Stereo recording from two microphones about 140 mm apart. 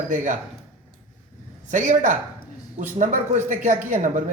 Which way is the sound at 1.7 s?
65° right (ahead or behind).